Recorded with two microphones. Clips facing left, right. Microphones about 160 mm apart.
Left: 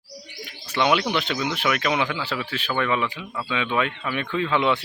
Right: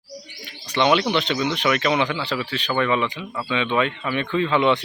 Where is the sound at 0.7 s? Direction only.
5° left (ahead or behind).